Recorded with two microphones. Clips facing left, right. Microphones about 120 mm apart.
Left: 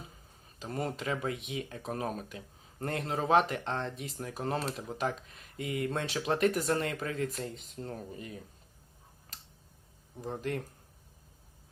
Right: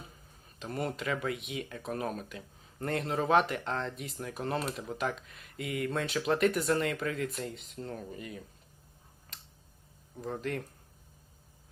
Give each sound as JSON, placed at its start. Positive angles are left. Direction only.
{"t": 0.6, "sound": "speech", "side_deg": 35}
{"t": 10.2, "sound": "speech", "side_deg": 30}